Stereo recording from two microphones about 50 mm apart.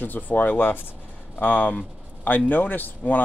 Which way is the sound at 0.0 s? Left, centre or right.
Left.